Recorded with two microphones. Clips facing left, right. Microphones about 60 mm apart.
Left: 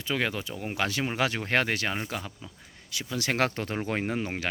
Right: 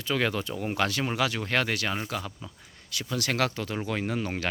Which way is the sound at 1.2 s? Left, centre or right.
Left.